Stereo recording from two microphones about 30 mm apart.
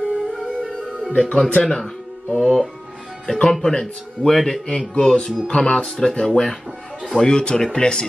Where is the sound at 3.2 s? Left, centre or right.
Left.